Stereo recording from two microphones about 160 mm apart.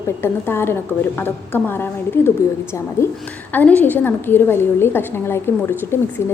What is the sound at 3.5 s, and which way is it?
A woman's voice, 10° left (ahead or behind).